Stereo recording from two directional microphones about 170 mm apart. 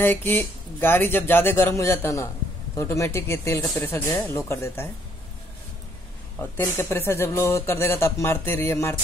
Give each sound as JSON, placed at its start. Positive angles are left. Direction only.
{"t": 0.0, "sound": "a man's voice", "side_deg": 10}
{"t": 6.5, "sound": "a man's voice", "side_deg": 15}